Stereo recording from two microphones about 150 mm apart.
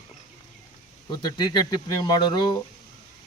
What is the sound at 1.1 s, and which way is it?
A man's voice, 25° left (ahead or behind).